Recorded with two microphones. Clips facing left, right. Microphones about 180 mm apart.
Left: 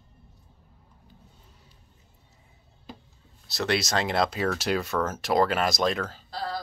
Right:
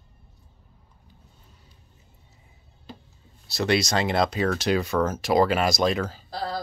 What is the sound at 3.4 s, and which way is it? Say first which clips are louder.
Speech: right 4 dB; centre (ahead or behind).